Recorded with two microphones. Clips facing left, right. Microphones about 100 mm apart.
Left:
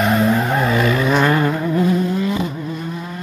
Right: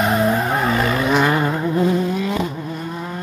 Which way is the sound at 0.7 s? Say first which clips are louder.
Left 2 dB; 30° right (ahead or behind).